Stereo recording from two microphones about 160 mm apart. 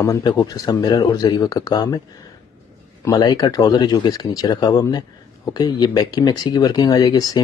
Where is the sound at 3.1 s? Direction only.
25° left (ahead or behind).